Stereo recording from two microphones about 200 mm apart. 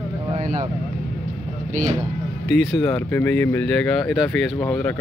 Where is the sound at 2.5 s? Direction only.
Centre (ahead or behind).